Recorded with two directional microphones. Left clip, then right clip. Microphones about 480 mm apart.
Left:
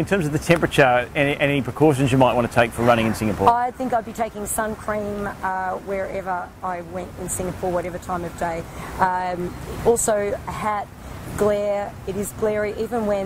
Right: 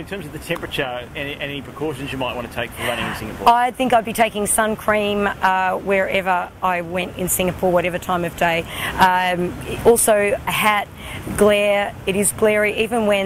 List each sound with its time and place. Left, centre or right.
0.0 s speech: left
3.4 s speech: right